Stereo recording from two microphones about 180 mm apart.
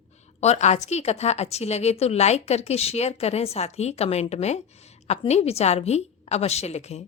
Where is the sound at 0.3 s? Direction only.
35° left (ahead or behind).